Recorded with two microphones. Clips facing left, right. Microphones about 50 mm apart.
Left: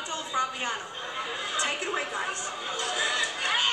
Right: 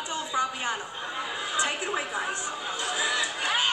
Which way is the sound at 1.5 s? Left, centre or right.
Centre.